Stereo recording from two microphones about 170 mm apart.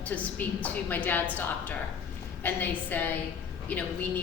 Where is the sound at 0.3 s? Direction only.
10° left (ahead or behind).